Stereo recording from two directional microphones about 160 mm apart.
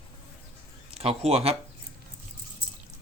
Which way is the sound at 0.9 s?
40° right (ahead or behind).